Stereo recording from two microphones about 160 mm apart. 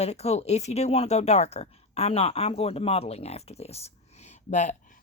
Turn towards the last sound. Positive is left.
turn(degrees=50)  # may be behind; listen again after turning